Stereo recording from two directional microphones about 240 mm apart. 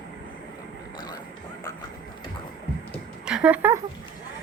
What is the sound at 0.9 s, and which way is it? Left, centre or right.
Vehicle, centre.